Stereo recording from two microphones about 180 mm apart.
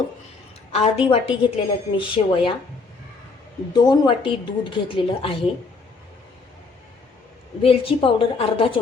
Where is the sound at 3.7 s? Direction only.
25° left (ahead or behind).